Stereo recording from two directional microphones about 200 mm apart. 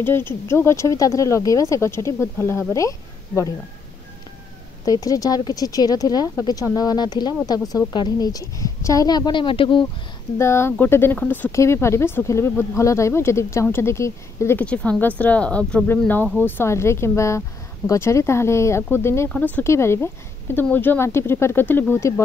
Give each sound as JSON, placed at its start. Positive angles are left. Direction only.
{"t": 0.0, "sound": "speech", "side_deg": 10}
{"t": 4.8, "sound": "speech", "side_deg": 15}
{"t": 10.3, "sound": "speech", "side_deg": 15}